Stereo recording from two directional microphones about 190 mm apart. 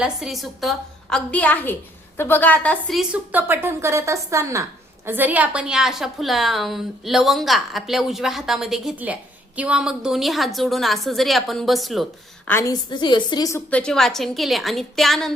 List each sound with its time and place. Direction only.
0.0 s a woman's voice: centre (ahead or behind)
12.5 s a woman's voice: 15° left (ahead or behind)
12.9 s a woman's voice: 25° left (ahead or behind)
13.7 s a woman's voice: 5° left (ahead or behind)